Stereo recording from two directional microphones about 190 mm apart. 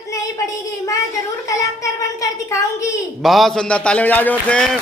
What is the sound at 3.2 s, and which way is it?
A man's voice, centre (ahead or behind).